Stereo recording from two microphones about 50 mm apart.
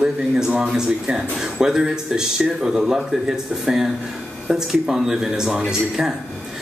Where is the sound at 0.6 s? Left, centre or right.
Centre.